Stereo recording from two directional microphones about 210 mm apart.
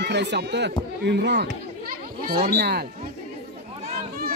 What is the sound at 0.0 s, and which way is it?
Speech, 55° right (ahead or behind).